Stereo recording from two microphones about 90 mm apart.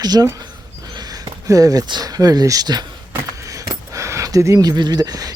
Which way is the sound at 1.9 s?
45° right (ahead or behind).